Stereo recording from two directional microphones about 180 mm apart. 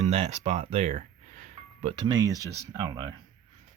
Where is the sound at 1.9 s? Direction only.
20° right (ahead or behind).